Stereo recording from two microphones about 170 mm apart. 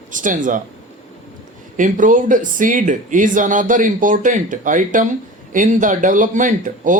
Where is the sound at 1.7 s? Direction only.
50° right (ahead or behind).